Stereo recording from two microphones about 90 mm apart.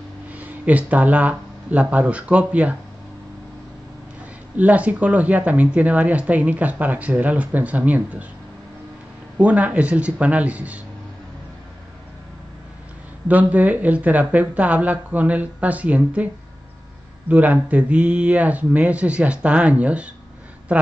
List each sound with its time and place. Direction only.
0.3 s speech: 15° right (ahead or behind)
4.6 s speech: 15° right (ahead or behind)
9.4 s speech: 15° right (ahead or behind)
13.3 s speech: 20° right (ahead or behind)
17.3 s speech: 20° right (ahead or behind)